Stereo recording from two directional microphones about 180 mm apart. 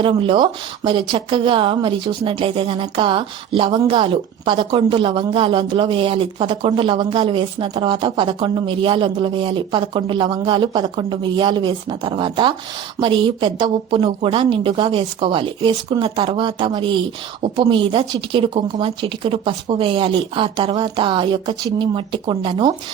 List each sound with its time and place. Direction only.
0.0 s a woman's voice: 30° right (ahead or behind)